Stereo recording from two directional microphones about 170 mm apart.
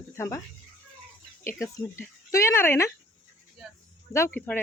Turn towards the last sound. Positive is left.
turn(degrees=10)  # may be behind; listen again after turning